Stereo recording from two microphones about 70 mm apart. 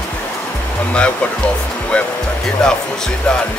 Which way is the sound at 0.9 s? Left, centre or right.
Centre.